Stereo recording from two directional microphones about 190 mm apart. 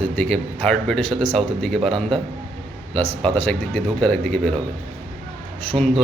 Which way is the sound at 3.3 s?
5° left (ahead or behind).